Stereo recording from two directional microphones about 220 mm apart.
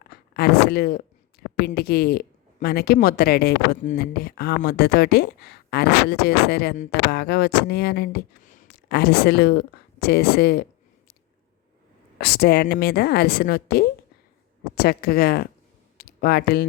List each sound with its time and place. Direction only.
0.1 s speech: 45° left (ahead or behind)
12.2 s speech: 45° left (ahead or behind)